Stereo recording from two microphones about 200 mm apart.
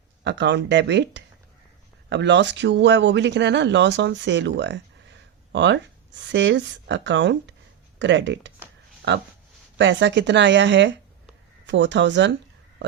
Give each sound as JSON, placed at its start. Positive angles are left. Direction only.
{"t": 0.3, "sound": "speech", "side_deg": -60}